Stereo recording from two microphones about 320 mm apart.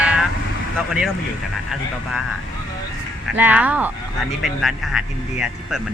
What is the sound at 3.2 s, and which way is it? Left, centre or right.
Speech, centre.